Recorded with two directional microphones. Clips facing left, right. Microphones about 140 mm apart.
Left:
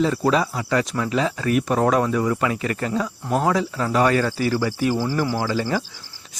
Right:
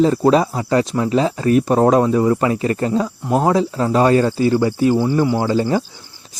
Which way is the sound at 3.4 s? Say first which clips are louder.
Right 6 dB; 30° right (ahead or behind).